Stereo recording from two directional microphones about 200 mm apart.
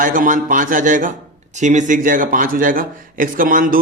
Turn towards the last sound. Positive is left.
turn(degrees=-45)  # may be behind; listen again after turning